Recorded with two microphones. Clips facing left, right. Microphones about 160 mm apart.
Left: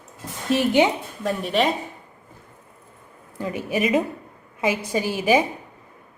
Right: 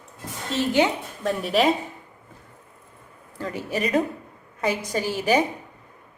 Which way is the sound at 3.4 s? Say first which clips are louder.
Left 3 dB; 15° left (ahead or behind).